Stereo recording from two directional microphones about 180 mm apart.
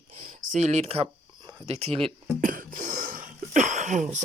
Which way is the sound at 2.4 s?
50° right (ahead or behind).